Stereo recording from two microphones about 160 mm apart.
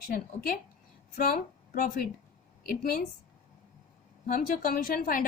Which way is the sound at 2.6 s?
70° left (ahead or behind).